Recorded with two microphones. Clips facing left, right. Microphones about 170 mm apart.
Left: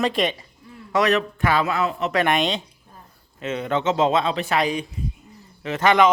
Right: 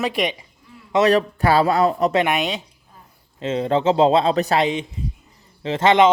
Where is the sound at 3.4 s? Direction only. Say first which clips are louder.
Right 4 dB; 30° right (ahead or behind).